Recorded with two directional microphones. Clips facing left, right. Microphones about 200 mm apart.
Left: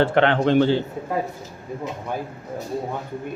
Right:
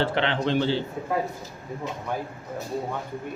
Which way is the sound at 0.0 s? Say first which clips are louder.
Left 7 dB; 50° left (ahead or behind).